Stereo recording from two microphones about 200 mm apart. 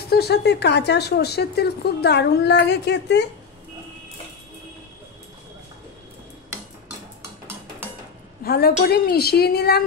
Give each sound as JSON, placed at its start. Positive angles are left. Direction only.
{"t": 0.1, "sound": "speech", "side_deg": 55}
{"t": 8.5, "sound": "a woman's voice", "side_deg": 50}